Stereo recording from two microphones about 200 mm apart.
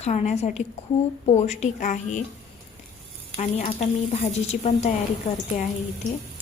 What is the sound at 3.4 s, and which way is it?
A woman's voice, 35° left (ahead or behind).